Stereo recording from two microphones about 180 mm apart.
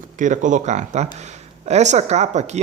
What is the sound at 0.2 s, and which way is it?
Speech, 45° right (ahead or behind).